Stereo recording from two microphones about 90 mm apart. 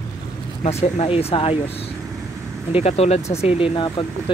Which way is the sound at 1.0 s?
90° left.